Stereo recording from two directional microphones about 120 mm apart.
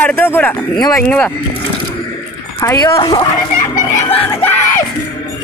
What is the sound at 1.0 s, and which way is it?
Speech, 10° left (ahead or behind).